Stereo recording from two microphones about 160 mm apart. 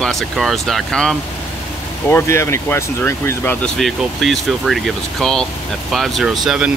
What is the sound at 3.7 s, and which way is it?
Speech, centre (ahead or behind).